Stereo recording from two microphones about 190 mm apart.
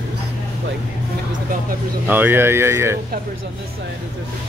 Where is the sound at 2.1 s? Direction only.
10° right (ahead or behind).